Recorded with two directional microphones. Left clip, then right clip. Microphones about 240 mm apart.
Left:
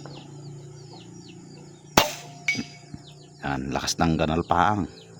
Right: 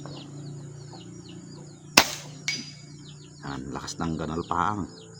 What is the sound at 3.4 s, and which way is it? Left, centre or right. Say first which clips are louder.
Speech: left 8 dB; left.